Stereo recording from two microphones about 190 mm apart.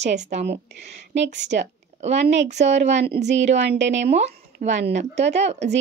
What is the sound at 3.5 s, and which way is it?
Speech, 70° right (ahead or behind).